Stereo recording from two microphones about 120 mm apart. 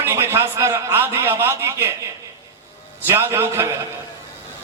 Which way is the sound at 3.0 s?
20° right (ahead or behind).